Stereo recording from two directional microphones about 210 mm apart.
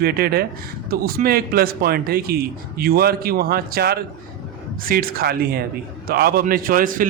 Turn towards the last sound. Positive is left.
turn(degrees=-40)  # may be behind; listen again after turning